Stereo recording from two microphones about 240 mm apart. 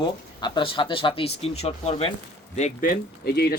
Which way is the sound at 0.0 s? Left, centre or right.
Centre.